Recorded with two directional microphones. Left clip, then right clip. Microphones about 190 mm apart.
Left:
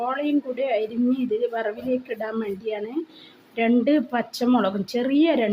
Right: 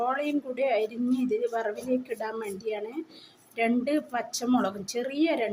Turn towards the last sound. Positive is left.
turn(degrees=30)  # may be behind; listen again after turning